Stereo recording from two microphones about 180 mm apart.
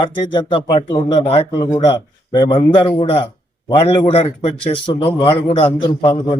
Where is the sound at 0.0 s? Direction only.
25° left (ahead or behind).